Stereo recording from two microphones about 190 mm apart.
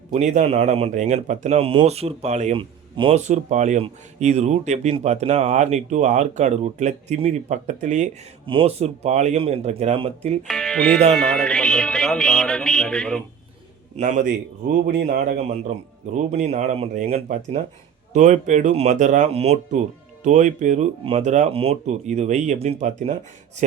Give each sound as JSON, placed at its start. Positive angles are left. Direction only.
{"t": 0.1, "sound": "speech", "side_deg": -40}
{"t": 10.4, "sound": "music", "side_deg": 0}
{"t": 13.9, "sound": "speech", "side_deg": -40}